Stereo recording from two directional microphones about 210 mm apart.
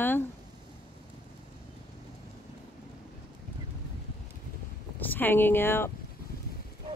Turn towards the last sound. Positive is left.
turn(degrees=10)  # may be behind; listen again after turning